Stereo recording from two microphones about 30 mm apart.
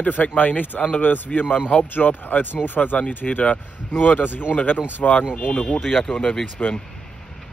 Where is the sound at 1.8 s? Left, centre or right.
Left.